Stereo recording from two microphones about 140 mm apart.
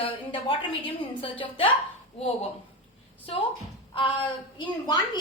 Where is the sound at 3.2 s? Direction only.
40° left (ahead or behind).